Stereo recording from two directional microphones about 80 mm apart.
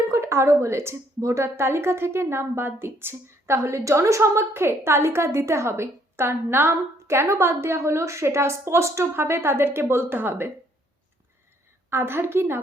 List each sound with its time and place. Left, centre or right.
0.1 s a woman's voice: right
11.9 s a woman's voice: right